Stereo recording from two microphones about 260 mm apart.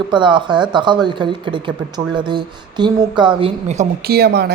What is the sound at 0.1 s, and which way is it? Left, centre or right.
A woman's voice, centre.